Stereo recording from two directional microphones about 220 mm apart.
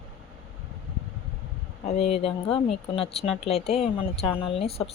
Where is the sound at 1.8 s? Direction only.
30° left (ahead or behind).